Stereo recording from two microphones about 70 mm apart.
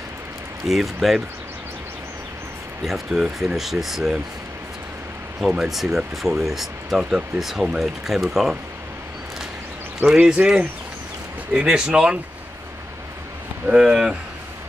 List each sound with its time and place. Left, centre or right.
0.7 s speech: centre
2.8 s speech: centre
5.5 s speech: centre
10.0 s a man's voice: centre
13.7 s a man's voice: centre